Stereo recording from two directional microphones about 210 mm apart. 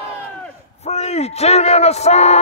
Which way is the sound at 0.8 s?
30° left (ahead or behind).